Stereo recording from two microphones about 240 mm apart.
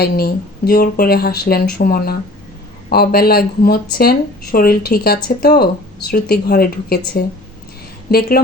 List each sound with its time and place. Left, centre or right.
0.0 s speech: left